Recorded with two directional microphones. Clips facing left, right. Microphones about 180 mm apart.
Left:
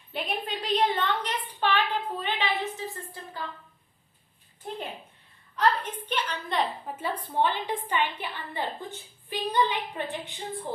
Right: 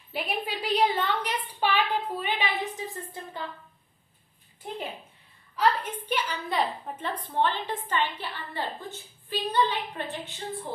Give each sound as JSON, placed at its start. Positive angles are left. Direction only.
{"t": 0.1, "sound": "a woman's voice", "side_deg": -5}
{"t": 5.5, "sound": "a woman's voice", "side_deg": -10}